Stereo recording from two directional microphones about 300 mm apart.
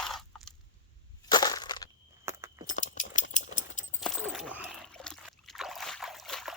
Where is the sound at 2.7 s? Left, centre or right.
Left.